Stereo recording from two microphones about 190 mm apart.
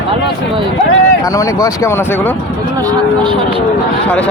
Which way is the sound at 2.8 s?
20° right (ahead or behind).